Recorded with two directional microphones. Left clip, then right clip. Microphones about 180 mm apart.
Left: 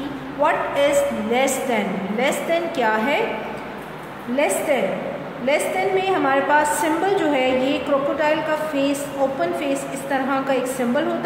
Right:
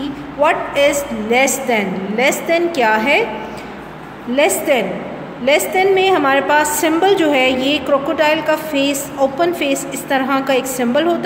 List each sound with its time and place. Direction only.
0.4 s a woman's voice: 45° right (ahead or behind)
4.4 s a woman's voice: 50° right (ahead or behind)